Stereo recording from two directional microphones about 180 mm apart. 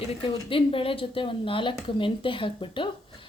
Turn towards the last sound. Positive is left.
turn(degrees=30)  # may be behind; listen again after turning